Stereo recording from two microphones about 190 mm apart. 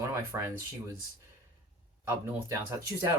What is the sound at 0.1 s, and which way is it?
Speech, 15° right (ahead or behind).